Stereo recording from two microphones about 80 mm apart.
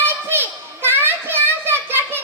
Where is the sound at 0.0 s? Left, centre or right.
Right.